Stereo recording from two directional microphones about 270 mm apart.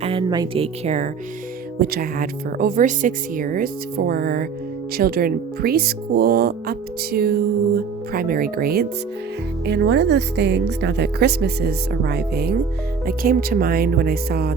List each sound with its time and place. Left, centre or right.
0.0 s speech: centre; by 14.5 s right